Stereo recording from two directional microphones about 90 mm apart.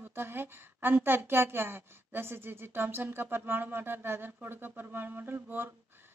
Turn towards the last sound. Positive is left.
turn(degrees=-25)  # may be behind; listen again after turning